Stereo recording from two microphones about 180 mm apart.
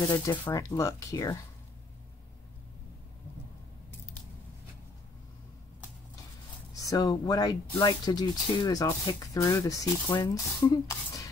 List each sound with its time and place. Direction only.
0.1 s speech: 20° left (ahead or behind)
6.7 s speech: 20° left (ahead or behind)